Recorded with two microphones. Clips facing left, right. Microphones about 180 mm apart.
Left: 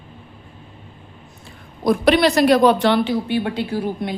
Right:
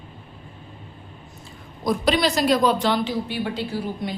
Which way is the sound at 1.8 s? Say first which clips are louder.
Left 6 dB; 60° left (ahead or behind).